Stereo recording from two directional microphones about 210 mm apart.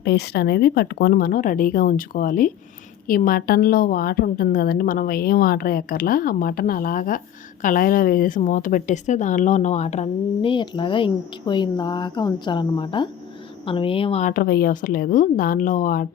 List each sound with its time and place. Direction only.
0.0 s a woman's voice: 50° left (ahead or behind)